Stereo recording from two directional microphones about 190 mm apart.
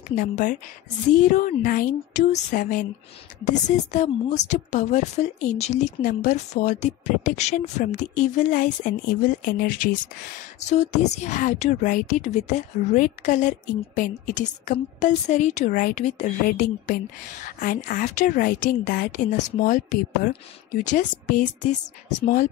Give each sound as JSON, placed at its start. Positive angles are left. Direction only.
{"t": 0.1, "sound": "a woman's voice", "side_deg": 40}